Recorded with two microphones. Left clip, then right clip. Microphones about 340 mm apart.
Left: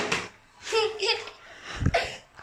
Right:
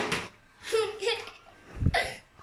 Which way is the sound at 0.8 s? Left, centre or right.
Centre.